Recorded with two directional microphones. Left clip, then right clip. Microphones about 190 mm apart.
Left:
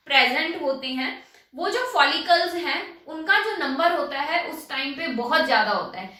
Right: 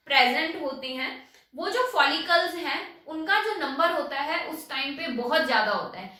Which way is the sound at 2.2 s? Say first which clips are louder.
Left 3 dB; centre (ahead or behind).